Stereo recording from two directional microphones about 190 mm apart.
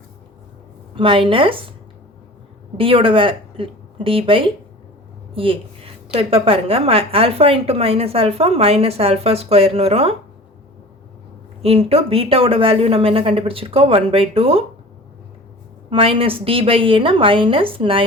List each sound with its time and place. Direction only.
0.9 s speech: 25° right (ahead or behind)
2.7 s a woman's voice: 30° right (ahead or behind)
11.6 s speech: 30° right (ahead or behind)
15.9 s speech: 30° right (ahead or behind)